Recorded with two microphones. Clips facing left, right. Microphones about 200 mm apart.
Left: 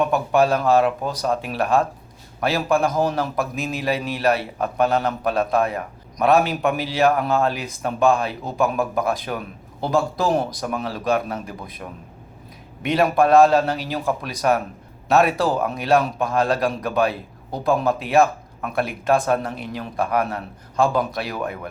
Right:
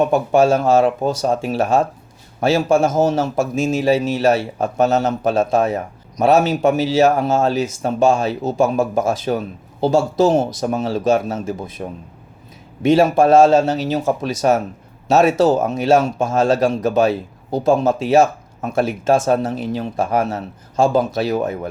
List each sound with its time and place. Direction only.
0.0 s a man's voice: 25° right (ahead or behind)
15.6 s a man's voice: 25° right (ahead or behind)